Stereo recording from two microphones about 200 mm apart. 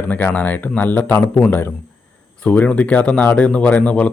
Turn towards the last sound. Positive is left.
turn(degrees=5)  # may be behind; listen again after turning